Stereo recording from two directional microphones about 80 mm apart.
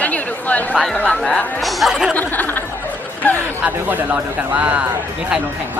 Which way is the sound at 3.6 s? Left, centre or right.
Right.